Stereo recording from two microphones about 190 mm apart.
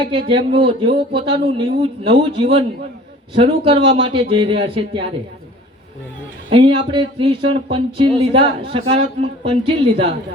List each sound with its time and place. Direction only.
0.0 s speech: 25° right (ahead or behind)
6.5 s speech: 30° right (ahead or behind)